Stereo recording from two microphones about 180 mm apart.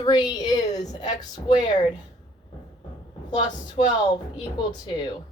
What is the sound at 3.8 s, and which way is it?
Speech, 35° left (ahead or behind).